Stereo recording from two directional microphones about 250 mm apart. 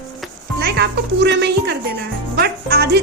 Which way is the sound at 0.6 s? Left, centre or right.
Right.